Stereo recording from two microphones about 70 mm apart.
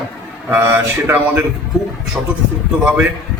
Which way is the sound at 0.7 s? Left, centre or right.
Right.